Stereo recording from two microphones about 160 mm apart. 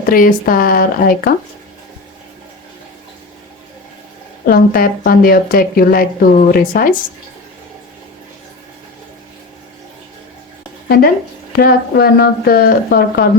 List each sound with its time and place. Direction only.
0.0 s speech: 60° left (ahead or behind)
4.4 s speech: 65° left (ahead or behind)
10.8 s speech: 70° left (ahead or behind)